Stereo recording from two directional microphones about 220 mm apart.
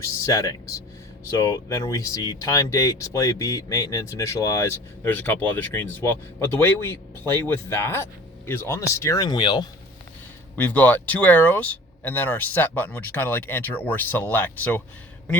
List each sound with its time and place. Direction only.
0.0 s speech: 15° left (ahead or behind)
10.6 s speech: 5° left (ahead or behind)